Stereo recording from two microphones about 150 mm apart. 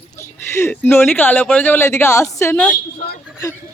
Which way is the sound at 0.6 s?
15° left (ahead or behind).